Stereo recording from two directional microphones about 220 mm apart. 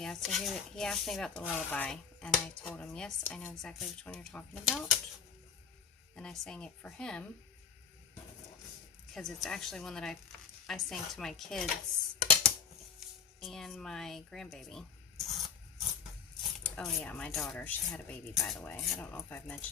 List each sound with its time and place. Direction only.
0.0 s speech: centre (ahead or behind)
6.1 s speech: 5° left (ahead or behind)
9.1 s speech: centre (ahead or behind)
13.4 s speech: centre (ahead or behind)
16.6 s speech: 5° left (ahead or behind)